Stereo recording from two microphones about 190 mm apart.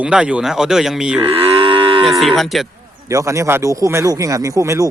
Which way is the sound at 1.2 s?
30° right (ahead or behind).